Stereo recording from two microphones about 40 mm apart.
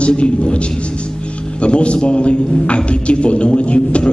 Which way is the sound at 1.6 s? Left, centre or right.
Left.